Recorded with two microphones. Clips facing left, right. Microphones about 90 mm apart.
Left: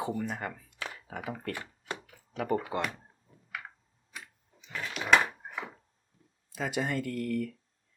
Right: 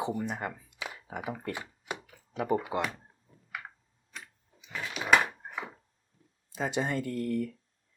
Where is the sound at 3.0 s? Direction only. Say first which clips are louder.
Even; centre (ahead or behind).